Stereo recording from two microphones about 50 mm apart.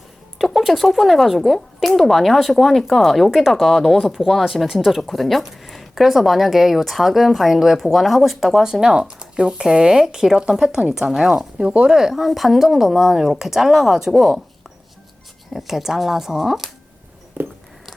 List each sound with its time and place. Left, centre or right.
0.3 s speech: centre
11.5 s speech: right
11.9 s speech: centre
15.5 s speech: centre
17.4 s a sound: right